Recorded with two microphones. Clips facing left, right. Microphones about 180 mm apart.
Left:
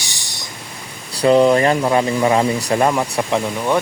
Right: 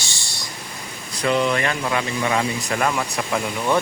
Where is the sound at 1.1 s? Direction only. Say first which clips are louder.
Left 8 dB; 35° left (ahead or behind).